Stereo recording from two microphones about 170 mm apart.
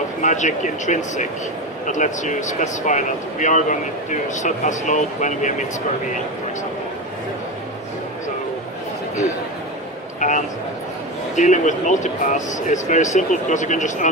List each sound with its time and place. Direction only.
0.2 s speech: 45° left (ahead or behind)
10.2 s a sound: 45° left (ahead or behind)
11.3 s speech: 45° left (ahead or behind)